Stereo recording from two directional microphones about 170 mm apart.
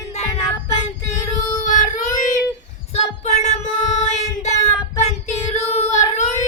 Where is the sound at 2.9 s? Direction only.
40° left (ahead or behind).